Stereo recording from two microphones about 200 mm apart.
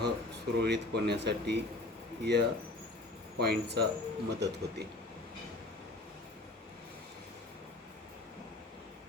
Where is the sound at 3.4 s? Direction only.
55° right (ahead or behind).